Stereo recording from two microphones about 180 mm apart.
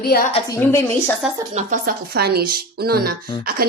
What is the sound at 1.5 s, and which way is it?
Speech, 50° right (ahead or behind).